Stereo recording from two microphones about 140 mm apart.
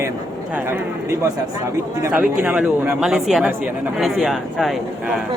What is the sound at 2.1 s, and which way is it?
Speech, 10° right (ahead or behind).